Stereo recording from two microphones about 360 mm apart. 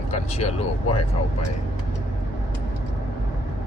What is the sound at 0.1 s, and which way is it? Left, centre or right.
Speech, centre.